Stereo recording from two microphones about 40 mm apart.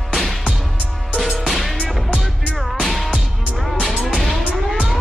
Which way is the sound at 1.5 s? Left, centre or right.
Centre.